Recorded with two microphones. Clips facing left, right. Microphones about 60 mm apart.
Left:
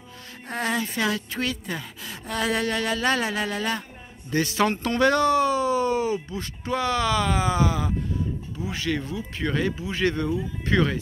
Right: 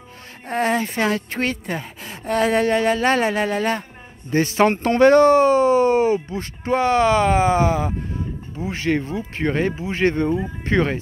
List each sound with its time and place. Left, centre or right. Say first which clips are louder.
0.5 s speech: right 6 dB; right